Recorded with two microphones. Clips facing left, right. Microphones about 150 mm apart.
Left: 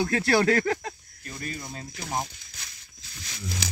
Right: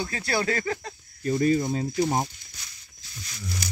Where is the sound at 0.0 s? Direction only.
65° left (ahead or behind).